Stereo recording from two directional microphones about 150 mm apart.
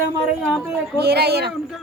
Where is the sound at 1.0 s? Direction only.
90° right.